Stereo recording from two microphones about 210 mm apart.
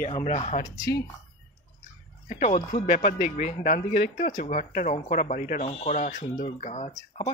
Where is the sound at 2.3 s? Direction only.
35° left (ahead or behind).